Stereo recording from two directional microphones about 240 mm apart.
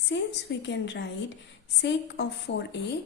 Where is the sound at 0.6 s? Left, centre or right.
Left.